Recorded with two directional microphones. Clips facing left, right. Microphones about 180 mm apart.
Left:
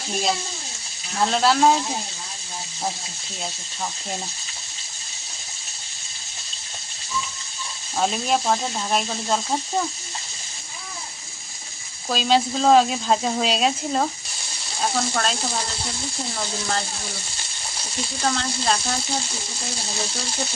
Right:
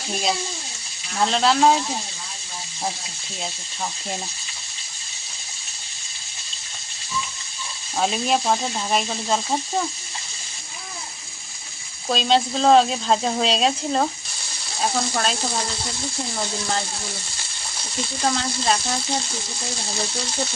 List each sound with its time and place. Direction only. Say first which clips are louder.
1.2 s speech: even; 5° left (ahead or behind)
7.9 s speech: right 1 dB; centre (ahead or behind)
12.0 s speech: even; 5° left (ahead or behind)
18.2 s speech: right 1 dB; 10° right (ahead or behind)